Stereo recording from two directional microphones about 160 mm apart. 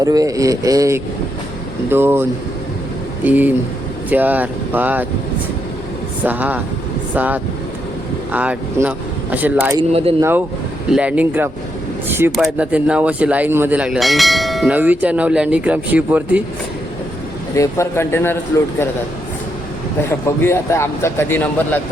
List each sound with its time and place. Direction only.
0.0 s speech: 20° right (ahead or behind)
3.2 s speech: 10° right (ahead or behind)
6.2 s speech: 10° right (ahead or behind)
9.9 s speech: 40° right (ahead or behind)
10.2 s speech: 15° right (ahead or behind)
12.0 s a sound: 15° right (ahead or behind)
12.4 s speech: 5° right (ahead or behind)
17.5 s a man's voice: 20° left (ahead or behind)
20.0 s a man's voice: 15° left (ahead or behind)